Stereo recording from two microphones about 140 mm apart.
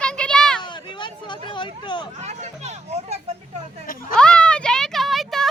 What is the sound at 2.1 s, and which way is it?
Hubbub, 50° right (ahead or behind).